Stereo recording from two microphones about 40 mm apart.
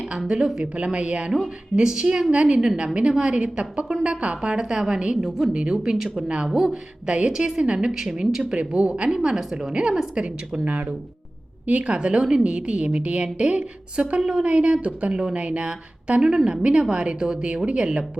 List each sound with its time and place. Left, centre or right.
0.3 s a woman's voice: centre
0.6 s speech: right
1.7 s a woman's voice: centre
2.3 s a woman's voice: right
2.6 s a woman's voice: centre
8.5 s a woman's voice: right
9.1 s a woman's voice: centre
10.6 s a woman's voice: right
15.1 s a woman's voice: right
16.2 s a woman's voice: centre
16.6 s a woman's voice: right